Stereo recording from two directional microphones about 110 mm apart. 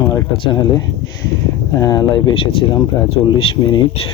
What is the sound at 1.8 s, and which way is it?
Speech, 35° left (ahead or behind).